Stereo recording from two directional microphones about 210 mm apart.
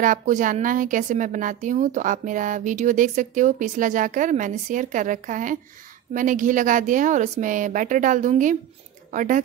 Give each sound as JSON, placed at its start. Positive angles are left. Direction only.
{"t": 0.0, "sound": "a woman's voice", "side_deg": -35}